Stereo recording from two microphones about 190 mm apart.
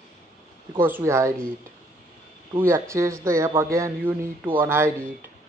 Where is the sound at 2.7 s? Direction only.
15° right (ahead or behind).